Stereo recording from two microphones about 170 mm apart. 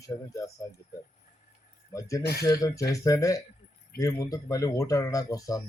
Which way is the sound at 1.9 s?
20° left (ahead or behind).